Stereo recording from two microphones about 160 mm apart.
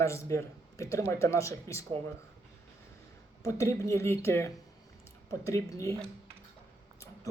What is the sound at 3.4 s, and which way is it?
Speech, 20° left (ahead or behind).